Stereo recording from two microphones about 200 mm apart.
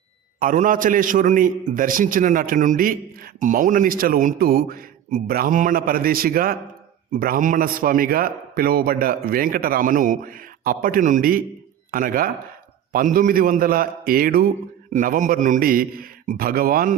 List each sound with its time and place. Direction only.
0.3 s a man's voice: 40° right (ahead or behind)